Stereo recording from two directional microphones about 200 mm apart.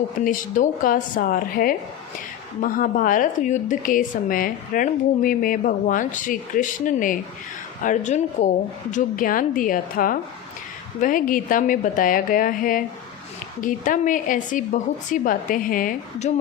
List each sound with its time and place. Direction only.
0.3 s a woman's voice: 40° left (ahead or behind)